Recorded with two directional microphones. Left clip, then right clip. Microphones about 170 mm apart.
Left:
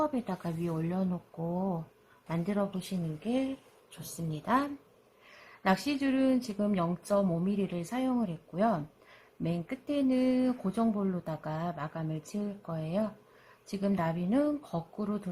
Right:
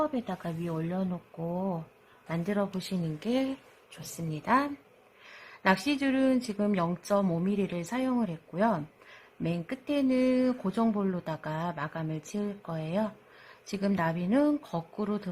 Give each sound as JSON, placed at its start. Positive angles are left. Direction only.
{"t": 0.0, "sound": "speech", "side_deg": 0}
{"t": 3.2, "sound": "speech", "side_deg": -25}
{"t": 3.9, "sound": "speech", "side_deg": -5}